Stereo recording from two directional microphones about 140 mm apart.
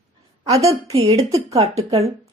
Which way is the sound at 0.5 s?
50° right (ahead or behind).